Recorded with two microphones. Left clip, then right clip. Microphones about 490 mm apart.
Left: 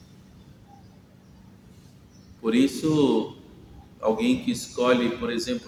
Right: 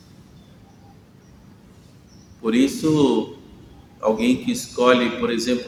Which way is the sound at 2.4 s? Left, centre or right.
Left.